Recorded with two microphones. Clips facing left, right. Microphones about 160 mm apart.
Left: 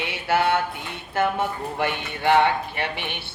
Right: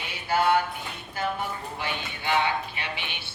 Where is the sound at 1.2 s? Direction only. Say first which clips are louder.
Left 7 dB; 70° left (ahead or behind).